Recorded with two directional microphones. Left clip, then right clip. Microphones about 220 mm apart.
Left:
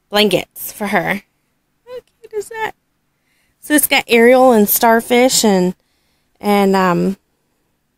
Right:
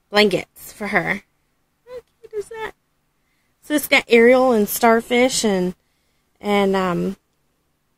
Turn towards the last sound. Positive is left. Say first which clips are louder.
# left 6 dB
turn(degrees=30)  # may be behind; listen again after turning